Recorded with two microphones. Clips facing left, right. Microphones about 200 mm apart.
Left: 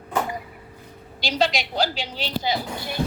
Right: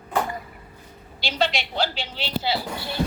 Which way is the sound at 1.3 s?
40° left (ahead or behind).